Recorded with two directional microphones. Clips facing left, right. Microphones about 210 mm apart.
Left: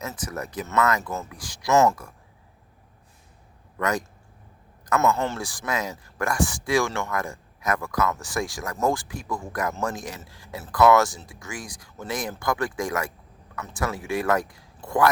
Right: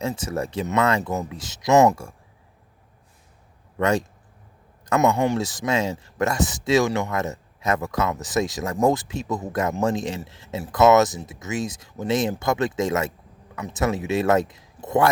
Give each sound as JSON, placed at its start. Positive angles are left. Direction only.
{"t": 0.1, "sound": "speech", "side_deg": -25}
{"t": 3.8, "sound": "speech", "side_deg": -25}
{"t": 4.9, "sound": "speech", "side_deg": -15}